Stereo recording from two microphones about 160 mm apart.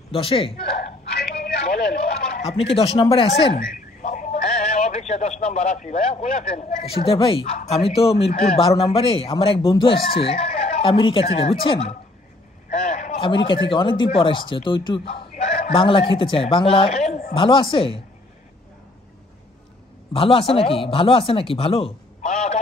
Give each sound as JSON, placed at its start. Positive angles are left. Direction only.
{"t": 0.1, "sound": "a man's voice", "side_deg": 35}
{"t": 1.1, "sound": "a sound", "side_deg": 85}
{"t": 2.4, "sound": "a man's voice", "side_deg": 40}
{"t": 3.5, "sound": "telephone", "side_deg": 55}
{"t": 5.4, "sound": "a man's voice", "side_deg": 40}
{"t": 20.1, "sound": "a man's voice", "side_deg": 35}
{"t": 22.2, "sound": "a sound", "side_deg": 45}